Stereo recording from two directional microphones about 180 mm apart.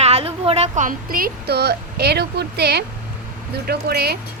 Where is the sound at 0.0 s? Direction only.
35° right (ahead or behind).